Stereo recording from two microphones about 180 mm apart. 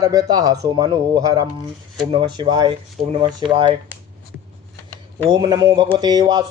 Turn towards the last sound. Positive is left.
turn(degrees=-20)  # may be behind; listen again after turning